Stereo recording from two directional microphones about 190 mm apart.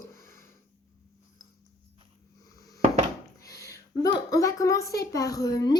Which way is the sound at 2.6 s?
20° left (ahead or behind).